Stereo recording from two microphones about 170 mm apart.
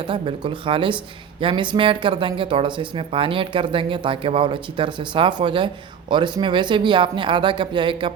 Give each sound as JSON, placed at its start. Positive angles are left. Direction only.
{"t": 0.1, "sound": "speech", "side_deg": -30}